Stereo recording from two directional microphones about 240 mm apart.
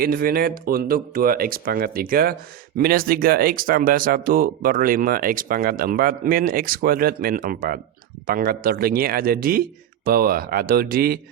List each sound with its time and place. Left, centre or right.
0.0 s speech: right